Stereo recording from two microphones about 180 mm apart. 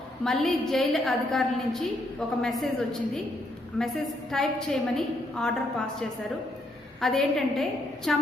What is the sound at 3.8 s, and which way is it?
A woman's voice, 5° left (ahead or behind).